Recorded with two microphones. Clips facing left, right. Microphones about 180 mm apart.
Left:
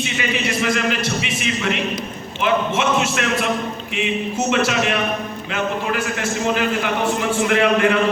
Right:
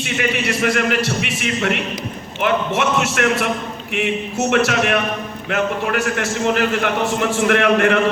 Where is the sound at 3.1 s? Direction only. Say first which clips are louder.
Right 3 dB; 55° right (ahead or behind).